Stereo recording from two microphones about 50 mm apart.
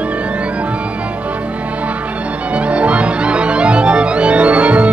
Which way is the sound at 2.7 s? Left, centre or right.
Right.